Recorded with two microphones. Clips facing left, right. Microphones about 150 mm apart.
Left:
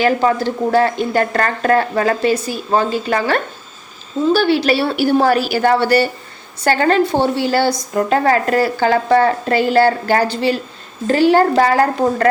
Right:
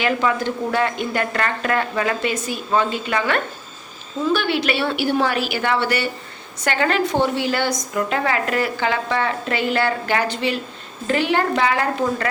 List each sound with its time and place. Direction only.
0.0 s a woman's voice: 35° left (ahead or behind)